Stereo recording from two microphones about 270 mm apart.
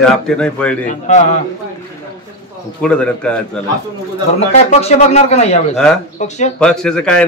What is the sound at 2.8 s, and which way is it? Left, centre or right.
Speech, centre.